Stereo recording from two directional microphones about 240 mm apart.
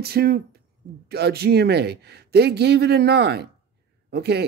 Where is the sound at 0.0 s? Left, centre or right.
Right.